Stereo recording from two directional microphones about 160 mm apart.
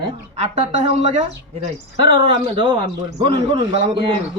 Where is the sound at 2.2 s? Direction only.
30° right (ahead or behind).